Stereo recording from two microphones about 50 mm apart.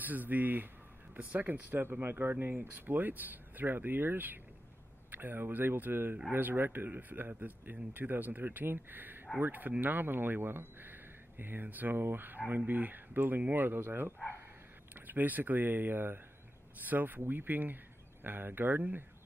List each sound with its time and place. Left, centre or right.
0.0 s speech: right